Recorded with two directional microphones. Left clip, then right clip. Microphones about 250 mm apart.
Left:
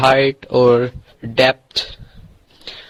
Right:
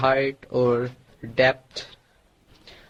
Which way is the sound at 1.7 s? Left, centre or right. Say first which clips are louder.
Left 14 dB; left.